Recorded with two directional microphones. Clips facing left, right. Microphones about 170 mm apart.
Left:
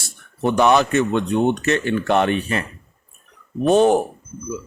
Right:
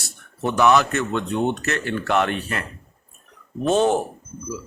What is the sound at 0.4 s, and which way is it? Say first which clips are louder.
A man's voice: left 2 dB; 20° left (ahead or behind).